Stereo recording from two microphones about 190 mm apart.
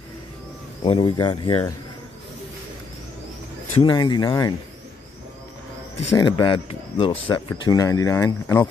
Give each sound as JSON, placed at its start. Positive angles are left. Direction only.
{"t": 0.8, "sound": "speech", "side_deg": 30}
{"t": 3.7, "sound": "speech", "side_deg": 25}
{"t": 6.1, "sound": "speech", "side_deg": 20}